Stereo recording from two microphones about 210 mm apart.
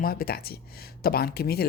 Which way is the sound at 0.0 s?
45° left (ahead or behind).